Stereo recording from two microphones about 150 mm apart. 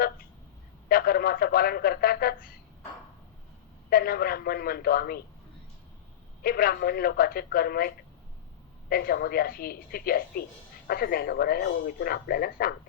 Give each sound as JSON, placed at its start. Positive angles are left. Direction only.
{"t": 0.9, "sound": "speech", "side_deg": 85}
{"t": 3.8, "sound": "speech", "side_deg": 90}
{"t": 6.4, "sound": "speech", "side_deg": 85}